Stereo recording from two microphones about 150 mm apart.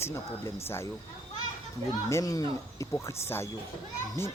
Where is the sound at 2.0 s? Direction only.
20° left (ahead or behind).